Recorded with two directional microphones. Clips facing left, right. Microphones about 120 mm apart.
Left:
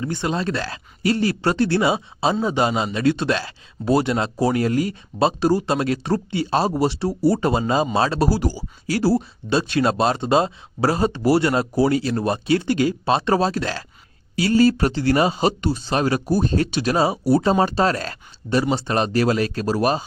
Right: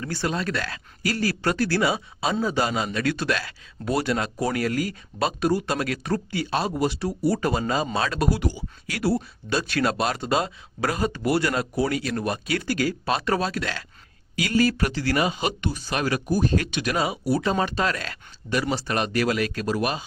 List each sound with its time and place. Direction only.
0.0 s speech: 20° left (ahead or behind); by 20.1 s 40° left (ahead or behind)